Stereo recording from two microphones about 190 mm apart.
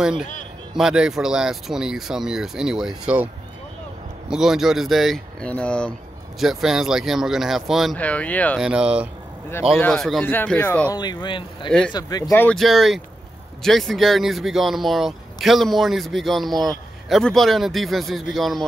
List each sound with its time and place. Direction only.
0.7 s speech: 5° right (ahead or behind)
4.3 s speech: centre (ahead or behind)
8.5 s speech: 5° right (ahead or behind); by 11.0 s 10° left (ahead or behind)
11.0 s speech: 25° left (ahead or behind); by 18.6 s centre (ahead or behind)